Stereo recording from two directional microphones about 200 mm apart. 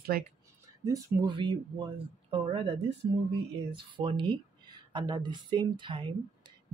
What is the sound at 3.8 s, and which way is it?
A woman's voice, 25° right (ahead or behind).